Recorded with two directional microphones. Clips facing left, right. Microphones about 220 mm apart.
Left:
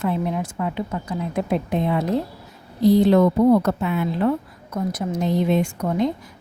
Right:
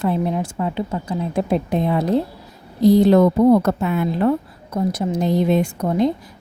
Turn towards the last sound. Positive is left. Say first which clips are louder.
# right 3 dB
turn(degrees=-35)  # may be behind; listen again after turning